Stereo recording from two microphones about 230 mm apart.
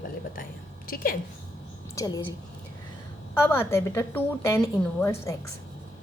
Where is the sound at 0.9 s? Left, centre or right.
Left.